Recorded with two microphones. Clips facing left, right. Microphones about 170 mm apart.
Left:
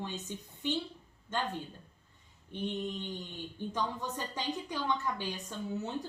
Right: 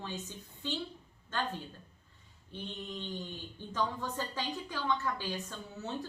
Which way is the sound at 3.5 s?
20° left (ahead or behind).